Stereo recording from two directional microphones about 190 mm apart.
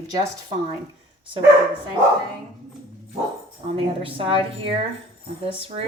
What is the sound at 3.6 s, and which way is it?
Speech, 30° right (ahead or behind).